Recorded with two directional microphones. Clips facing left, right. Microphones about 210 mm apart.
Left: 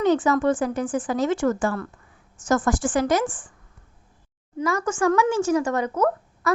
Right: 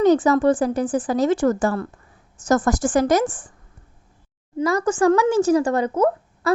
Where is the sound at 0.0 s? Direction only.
40° right (ahead or behind).